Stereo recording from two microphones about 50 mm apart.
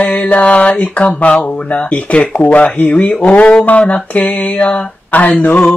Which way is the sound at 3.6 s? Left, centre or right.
Left.